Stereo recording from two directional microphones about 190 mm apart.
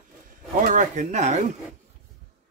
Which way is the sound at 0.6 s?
40° right (ahead or behind).